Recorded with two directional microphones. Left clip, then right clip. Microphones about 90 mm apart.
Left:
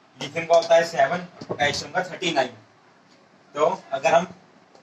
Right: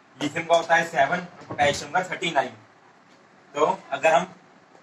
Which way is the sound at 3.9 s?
35° left (ahead or behind).